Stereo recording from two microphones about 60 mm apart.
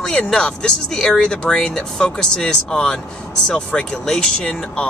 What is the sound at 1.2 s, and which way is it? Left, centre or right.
Speech, centre.